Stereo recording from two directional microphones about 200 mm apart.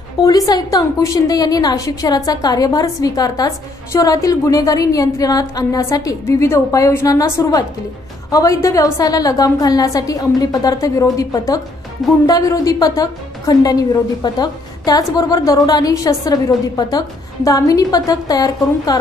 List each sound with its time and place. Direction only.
0.2 s a woman's voice: 15° left (ahead or behind)